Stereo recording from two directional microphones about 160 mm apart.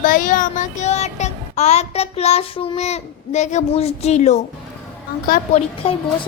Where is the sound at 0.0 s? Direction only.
55° left (ahead or behind).